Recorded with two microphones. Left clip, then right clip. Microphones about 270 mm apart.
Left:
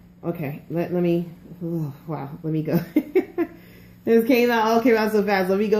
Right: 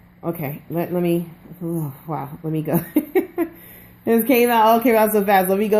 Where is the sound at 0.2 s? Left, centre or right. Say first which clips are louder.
Right 2 dB; right.